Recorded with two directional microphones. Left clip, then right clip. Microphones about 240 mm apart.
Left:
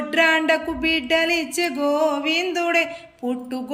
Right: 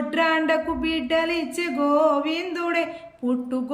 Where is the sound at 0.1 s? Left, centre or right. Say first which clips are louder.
Left 4 dB; centre.